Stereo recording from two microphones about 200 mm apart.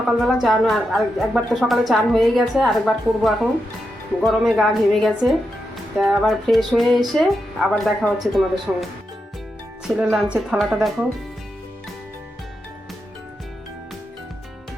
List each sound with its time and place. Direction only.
0.2 s speech: centre (ahead or behind)